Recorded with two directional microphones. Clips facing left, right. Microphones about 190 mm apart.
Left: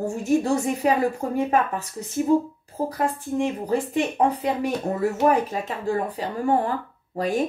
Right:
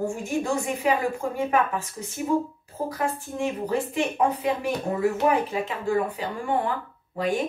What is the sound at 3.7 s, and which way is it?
Speech, 35° left (ahead or behind).